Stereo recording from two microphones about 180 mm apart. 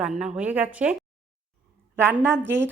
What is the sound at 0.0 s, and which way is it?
Speech, 5° right (ahead or behind).